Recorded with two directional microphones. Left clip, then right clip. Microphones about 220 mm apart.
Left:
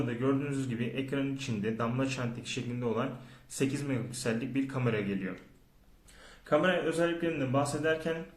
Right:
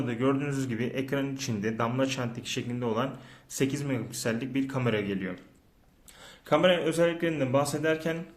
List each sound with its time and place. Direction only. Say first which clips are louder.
0.1 s a man's voice: right 3 dB; 35° right (ahead or behind)
6.5 s speech: right 4 dB; 45° right (ahead or behind)